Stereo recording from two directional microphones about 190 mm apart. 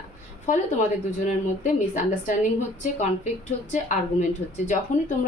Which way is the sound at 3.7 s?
40° left (ahead or behind).